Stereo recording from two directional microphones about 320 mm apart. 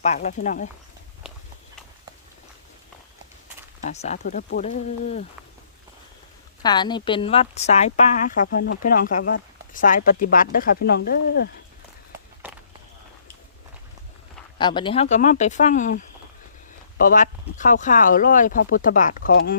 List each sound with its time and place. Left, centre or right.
0.0 s speech: left
3.8 s speech: left
6.6 s speech: centre
8.4 s speech: left
12.4 s a sound: centre
14.6 s speech: centre